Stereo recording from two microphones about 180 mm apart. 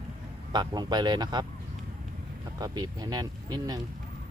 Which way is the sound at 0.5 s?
25° right (ahead or behind).